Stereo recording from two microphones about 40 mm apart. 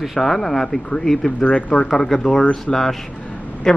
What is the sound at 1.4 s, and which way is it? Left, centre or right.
A man's voice, left.